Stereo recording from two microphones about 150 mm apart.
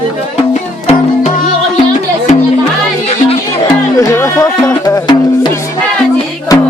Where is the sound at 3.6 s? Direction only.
20° left (ahead or behind).